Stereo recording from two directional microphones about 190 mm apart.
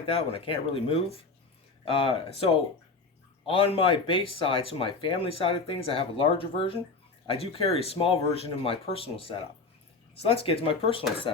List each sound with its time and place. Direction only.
0.0 s speech: 30° left (ahead or behind)
3.4 s speech: 30° left (ahead or behind)